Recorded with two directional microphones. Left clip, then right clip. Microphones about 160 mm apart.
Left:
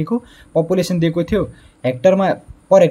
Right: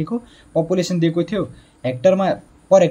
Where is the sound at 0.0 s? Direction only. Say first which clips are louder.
Left 4 dB; 30° left (ahead or behind).